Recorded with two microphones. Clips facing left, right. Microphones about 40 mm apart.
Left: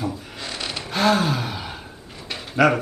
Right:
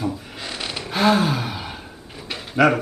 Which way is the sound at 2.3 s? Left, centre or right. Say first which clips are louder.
Right 1 dB; centre.